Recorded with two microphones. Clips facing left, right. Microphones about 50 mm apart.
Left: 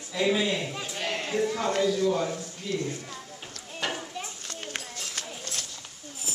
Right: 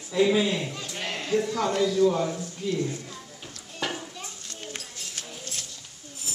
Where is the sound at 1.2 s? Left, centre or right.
Centre.